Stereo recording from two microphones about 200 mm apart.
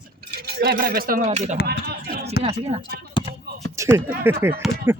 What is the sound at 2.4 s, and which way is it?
Speech, 25° right (ahead or behind).